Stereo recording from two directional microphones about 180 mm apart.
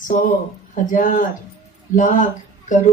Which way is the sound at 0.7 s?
45° left (ahead or behind).